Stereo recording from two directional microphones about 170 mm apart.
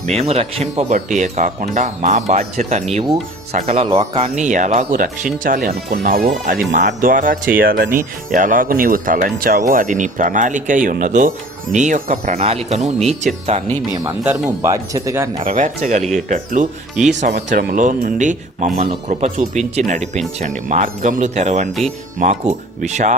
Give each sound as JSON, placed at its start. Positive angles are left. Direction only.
{"t": 0.0, "sound": "speech", "side_deg": -40}
{"t": 13.9, "sound": "speech", "side_deg": -20}
{"t": 15.4, "sound": "speech", "side_deg": -50}